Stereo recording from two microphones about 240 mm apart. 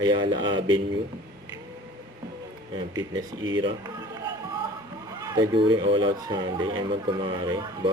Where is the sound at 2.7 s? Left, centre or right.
Centre.